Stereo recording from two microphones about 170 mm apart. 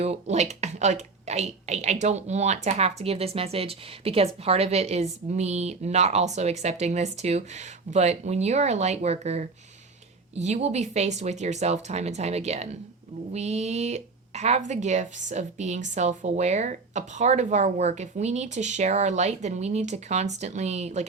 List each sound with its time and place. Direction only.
0.0 s speech: 40° right (ahead or behind)